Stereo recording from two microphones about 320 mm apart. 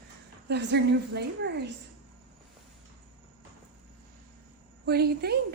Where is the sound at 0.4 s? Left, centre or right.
Right.